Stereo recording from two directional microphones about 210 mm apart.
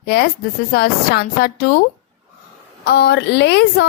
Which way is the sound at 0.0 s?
50° left (ahead or behind).